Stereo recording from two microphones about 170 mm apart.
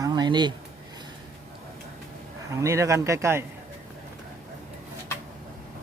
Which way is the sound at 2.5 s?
15° right (ahead or behind).